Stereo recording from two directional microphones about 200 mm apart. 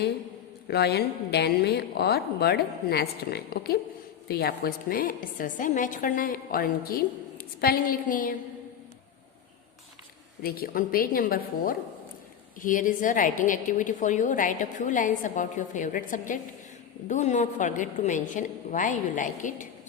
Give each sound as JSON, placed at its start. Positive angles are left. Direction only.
{"t": 0.7, "sound": "a woman's voice", "side_deg": 55}
{"t": 10.4, "sound": "a woman's voice", "side_deg": 50}